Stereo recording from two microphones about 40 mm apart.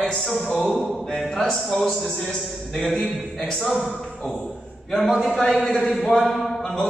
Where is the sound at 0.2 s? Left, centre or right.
Centre.